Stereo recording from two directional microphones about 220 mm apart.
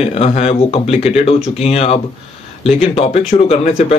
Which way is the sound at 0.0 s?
30° left (ahead or behind).